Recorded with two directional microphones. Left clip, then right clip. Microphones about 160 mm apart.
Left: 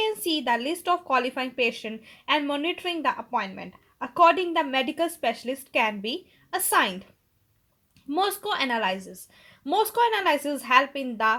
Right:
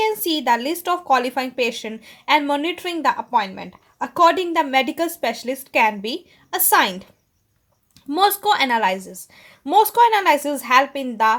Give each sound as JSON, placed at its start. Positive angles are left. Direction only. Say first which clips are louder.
{"t": 0.0, "sound": "a woman's voice", "louder": "right 6 dB", "side_deg": -35}
{"t": 8.1, "sound": "a woman's voice", "louder": "right 9 dB", "side_deg": -45}
{"t": 8.7, "sound": "a woman's voice", "louder": "right 7 dB", "side_deg": -20}